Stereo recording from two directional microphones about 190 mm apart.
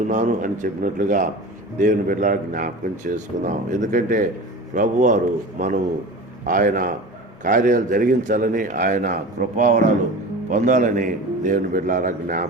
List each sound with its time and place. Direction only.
0.1 s a man's voice: 45° right (ahead or behind)